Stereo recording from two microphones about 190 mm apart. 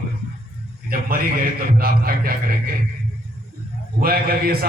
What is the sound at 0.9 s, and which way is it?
A man's voice, 50° right (ahead or behind).